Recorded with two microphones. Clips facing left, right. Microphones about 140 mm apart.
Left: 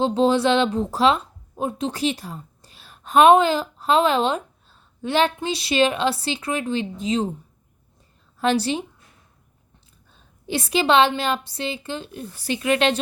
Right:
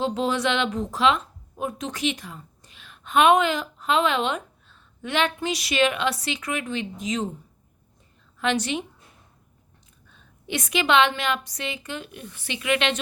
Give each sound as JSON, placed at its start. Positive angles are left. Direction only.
{"t": 0.0, "sound": "a woman's voice", "side_deg": 30}
{"t": 8.4, "sound": "a woman's voice", "side_deg": 35}
{"t": 10.1, "sound": "a sound", "side_deg": 35}
{"t": 11.2, "sound": "a woman's voice", "side_deg": 30}